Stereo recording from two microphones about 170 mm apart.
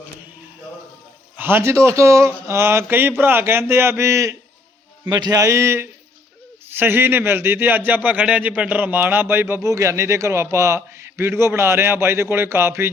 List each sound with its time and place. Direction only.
1.4 s speech: 10° right (ahead or behind)